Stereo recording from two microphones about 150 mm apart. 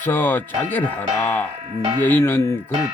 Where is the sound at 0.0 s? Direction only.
15° left (ahead or behind).